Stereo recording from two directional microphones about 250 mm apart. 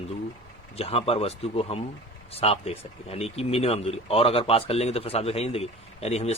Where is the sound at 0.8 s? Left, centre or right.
Left.